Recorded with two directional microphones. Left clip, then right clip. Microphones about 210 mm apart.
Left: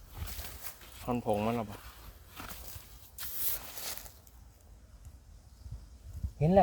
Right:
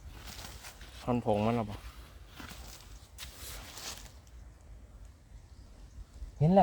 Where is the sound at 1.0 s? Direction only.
15° right (ahead or behind).